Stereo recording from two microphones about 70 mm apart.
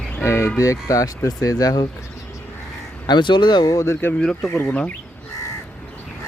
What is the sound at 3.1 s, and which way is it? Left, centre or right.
Speech, left.